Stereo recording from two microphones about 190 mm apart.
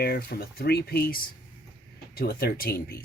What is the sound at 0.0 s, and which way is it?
Speech, 55° left (ahead or behind).